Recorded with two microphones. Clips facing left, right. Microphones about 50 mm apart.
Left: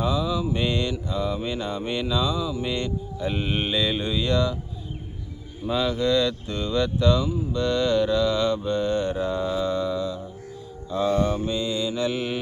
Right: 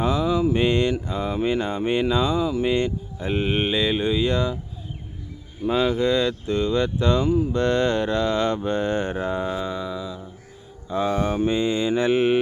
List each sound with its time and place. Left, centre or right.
0.0 s mantra: right
5.6 s mantra: right
7.3 s mantra: right
9.7 s a sound: centre
10.8 s mantra: right